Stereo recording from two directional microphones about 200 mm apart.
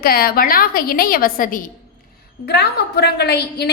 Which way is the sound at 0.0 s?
50° left (ahead or behind).